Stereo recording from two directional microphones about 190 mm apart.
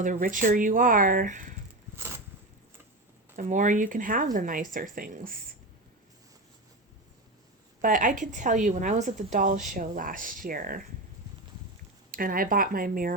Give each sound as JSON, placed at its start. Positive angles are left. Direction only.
{"t": 0.0, "sound": "speech", "side_deg": -45}
{"t": 2.0, "sound": "a sound", "side_deg": -10}
{"t": 3.3, "sound": "speech", "side_deg": -40}
{"t": 7.8, "sound": "speech", "side_deg": -45}
{"t": 12.1, "sound": "speech", "side_deg": -50}